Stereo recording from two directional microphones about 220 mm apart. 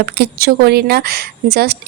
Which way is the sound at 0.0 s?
45° right (ahead or behind).